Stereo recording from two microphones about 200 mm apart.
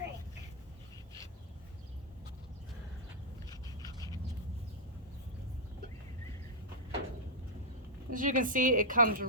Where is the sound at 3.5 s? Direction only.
20° left (ahead or behind).